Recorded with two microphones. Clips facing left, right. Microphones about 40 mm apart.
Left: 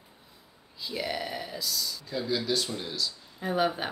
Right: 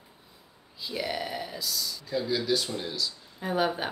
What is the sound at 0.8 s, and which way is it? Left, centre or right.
Speech, centre.